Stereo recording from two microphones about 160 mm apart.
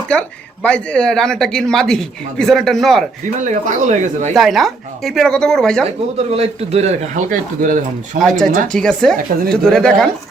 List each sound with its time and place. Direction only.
0.1 s speech: 5° left (ahead or behind)
3.4 s speech: 50° right (ahead or behind)
4.4 s speech: centre (ahead or behind)
6.1 s speech: 40° right (ahead or behind); by 8.2 s 55° right (ahead or behind)
8.2 s speech: centre (ahead or behind)